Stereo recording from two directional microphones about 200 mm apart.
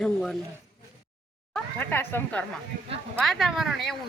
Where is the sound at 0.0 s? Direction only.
5° left (ahead or behind).